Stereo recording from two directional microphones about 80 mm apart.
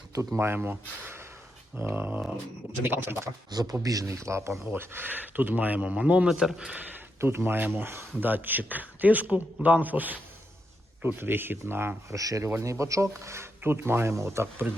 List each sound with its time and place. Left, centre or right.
0.1 s speech: right
0.3 s speech: right
3.5 s speech: right; by 6.7 s centre
7.2 s speech: right
12.1 s speech: right